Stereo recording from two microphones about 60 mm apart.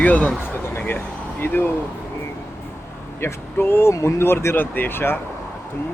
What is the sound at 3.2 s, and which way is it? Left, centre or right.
Speech, left.